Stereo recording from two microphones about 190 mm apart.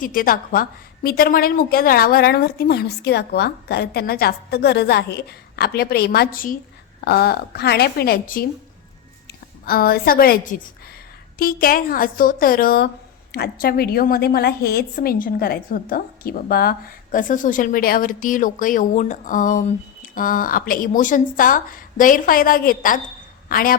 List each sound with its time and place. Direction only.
0.0 s a woman's voice: 50° left (ahead or behind)
9.6 s a woman's voice: 55° left (ahead or behind)